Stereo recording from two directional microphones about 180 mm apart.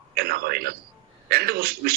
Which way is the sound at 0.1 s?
60° right (ahead or behind).